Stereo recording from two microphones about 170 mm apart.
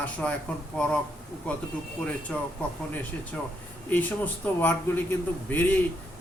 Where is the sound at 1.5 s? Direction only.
5° left (ahead or behind).